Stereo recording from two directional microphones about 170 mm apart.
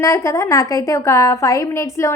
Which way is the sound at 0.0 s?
20° left (ahead or behind).